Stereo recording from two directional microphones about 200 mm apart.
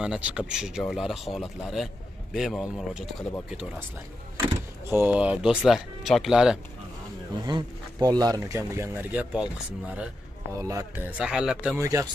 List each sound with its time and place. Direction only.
0.0 s speech: 5° right (ahead or behind)
4.4 s speech: 10° right (ahead or behind)
7.4 s speech: 20° right (ahead or behind)
10.6 s speech: 15° right (ahead or behind)
11.1 s speech: 5° right (ahead or behind)